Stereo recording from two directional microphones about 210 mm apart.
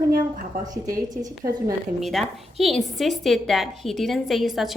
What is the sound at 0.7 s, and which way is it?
Speech, 15° right (ahead or behind).